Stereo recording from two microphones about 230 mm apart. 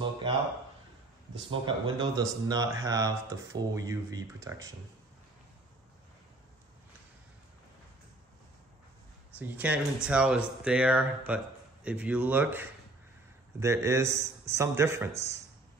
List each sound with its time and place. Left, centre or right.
1.5 s speech: centre
9.4 s speech: centre